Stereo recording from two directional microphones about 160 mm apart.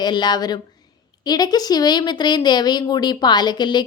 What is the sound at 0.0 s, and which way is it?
Speech, 25° left (ahead or behind).